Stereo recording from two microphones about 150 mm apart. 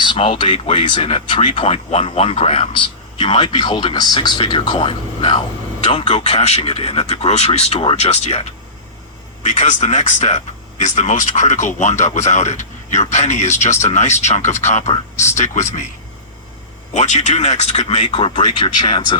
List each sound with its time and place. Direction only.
0.0 s a man's voice: 35° left (ahead or behind)
6.2 s speech: 45° left (ahead or behind)
16.9 s speech: 50° left (ahead or behind)
18.1 s speech: 35° left (ahead or behind)